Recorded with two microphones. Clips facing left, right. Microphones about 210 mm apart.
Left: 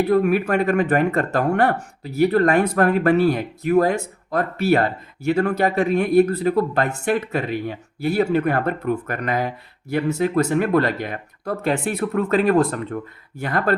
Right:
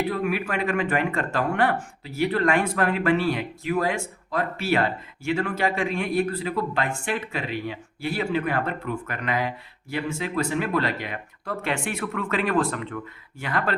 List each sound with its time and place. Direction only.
0.1 s speech: 45° left (ahead or behind)